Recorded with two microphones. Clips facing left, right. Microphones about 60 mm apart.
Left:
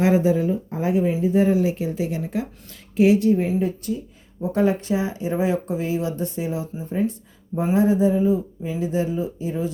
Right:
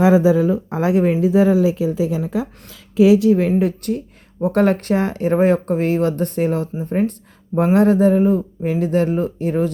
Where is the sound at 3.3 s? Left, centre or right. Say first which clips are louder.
Right 5 dB; right.